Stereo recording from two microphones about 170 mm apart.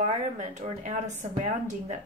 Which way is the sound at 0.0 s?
45° right (ahead or behind).